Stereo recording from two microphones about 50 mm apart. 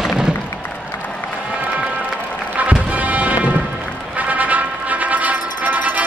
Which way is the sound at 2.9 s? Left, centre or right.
Right.